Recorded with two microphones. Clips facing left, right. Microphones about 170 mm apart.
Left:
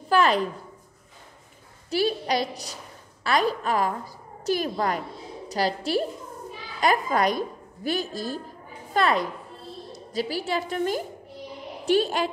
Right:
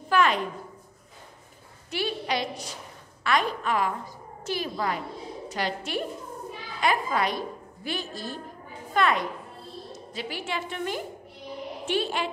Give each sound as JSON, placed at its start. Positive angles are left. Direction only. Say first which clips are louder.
{"t": 0.1, "sound": "a sound", "louder": "left 2 dB", "side_deg": 35}
{"t": 1.9, "sound": "a woman's voice", "louder": "left 5 dB", "side_deg": 40}
{"t": 5.5, "sound": "a woman's voice", "louder": "left 6 dB", "side_deg": 35}